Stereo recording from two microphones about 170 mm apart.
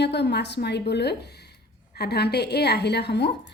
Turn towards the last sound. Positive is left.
turn(degrees=90)